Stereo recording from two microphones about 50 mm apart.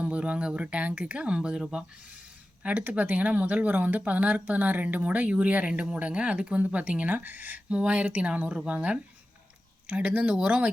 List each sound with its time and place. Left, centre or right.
0.0 s speech: right
5.8 s speech: right
7.7 s speech: right